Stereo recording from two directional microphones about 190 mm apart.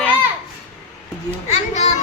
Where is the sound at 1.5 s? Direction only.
35° left (ahead or behind).